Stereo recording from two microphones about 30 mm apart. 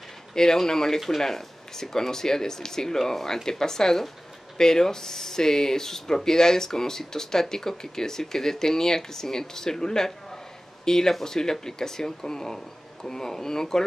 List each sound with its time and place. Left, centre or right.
0.3 s speech: centre